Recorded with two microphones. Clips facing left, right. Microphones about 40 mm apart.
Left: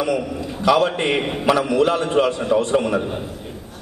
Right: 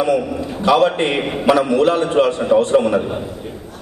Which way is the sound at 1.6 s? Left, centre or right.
Right.